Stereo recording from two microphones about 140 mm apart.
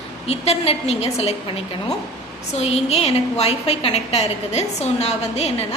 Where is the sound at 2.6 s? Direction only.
45° left (ahead or behind).